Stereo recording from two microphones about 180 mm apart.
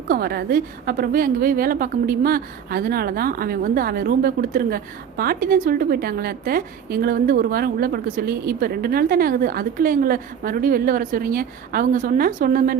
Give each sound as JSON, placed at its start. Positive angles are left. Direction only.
{"t": 0.1, "sound": "a woman's voice", "side_deg": -60}